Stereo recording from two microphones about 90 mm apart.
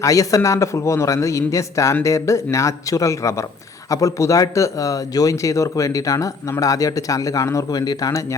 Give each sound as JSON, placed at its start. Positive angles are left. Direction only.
{"t": 0.0, "sound": "a man's voice", "side_deg": 40}